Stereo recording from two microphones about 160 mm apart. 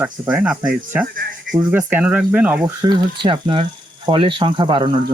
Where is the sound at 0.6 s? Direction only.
60° right (ahead or behind).